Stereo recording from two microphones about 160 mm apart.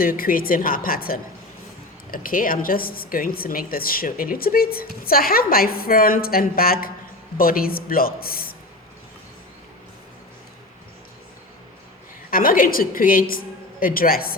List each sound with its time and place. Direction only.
0.0 s a woman's voice: 65° left (ahead or behind)
12.3 s a woman's voice: 65° left (ahead or behind)